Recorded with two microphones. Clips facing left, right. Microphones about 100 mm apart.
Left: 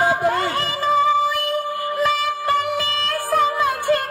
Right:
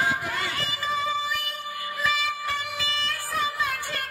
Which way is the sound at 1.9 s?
55° left (ahead or behind).